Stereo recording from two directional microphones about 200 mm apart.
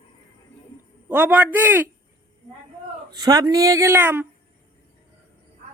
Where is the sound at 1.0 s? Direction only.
10° right (ahead or behind).